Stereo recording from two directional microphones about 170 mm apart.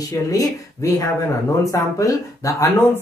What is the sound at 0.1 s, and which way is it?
Speech, 20° left (ahead or behind).